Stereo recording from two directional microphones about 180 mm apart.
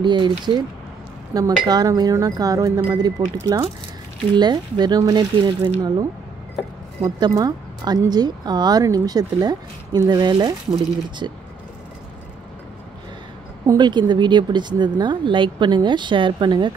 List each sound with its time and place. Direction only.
0.0 s speech: 25° right (ahead or behind)
7.2 s speech: 20° right (ahead or behind)
13.7 s speech: 25° right (ahead or behind)